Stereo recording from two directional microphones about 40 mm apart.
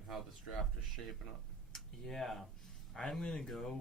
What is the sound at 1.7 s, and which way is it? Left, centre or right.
Speech, centre.